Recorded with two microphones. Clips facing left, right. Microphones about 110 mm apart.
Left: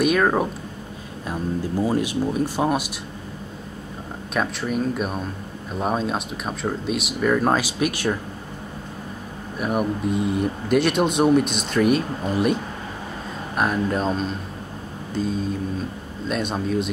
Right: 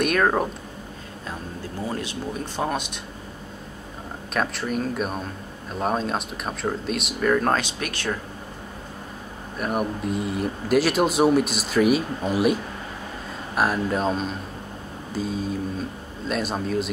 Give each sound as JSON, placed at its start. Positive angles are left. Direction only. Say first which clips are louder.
{"t": 0.0, "sound": "speech", "louder": "left 2 dB", "side_deg": 0}
{"t": 1.8, "sound": "speech", "louder": "left 7 dB", "side_deg": 15}
{"t": 4.3, "sound": "speech", "louder": "left 1 dB", "side_deg": 0}
{"t": 9.6, "sound": "speech", "louder": "left 2 dB", "side_deg": 0}
{"t": 13.6, "sound": "speech", "louder": "left 1 dB", "side_deg": 0}